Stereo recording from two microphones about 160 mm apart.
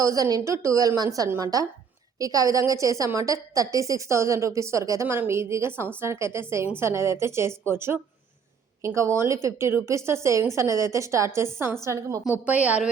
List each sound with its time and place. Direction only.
0.0 s a woman's voice: 20° right (ahead or behind)